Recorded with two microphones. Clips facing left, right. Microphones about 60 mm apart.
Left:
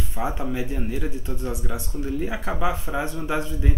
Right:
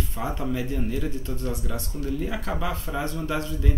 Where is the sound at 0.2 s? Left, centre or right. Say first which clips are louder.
Left 2 dB; centre.